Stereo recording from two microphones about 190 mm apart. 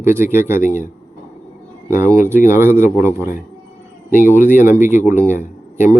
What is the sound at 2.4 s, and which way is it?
Speech, 15° right (ahead or behind).